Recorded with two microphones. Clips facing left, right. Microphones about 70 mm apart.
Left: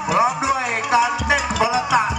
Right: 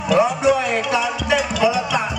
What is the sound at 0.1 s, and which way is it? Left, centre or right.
Music, left.